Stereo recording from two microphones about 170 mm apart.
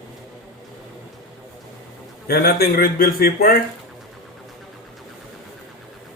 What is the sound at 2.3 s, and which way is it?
Speech, 65° left (ahead or behind).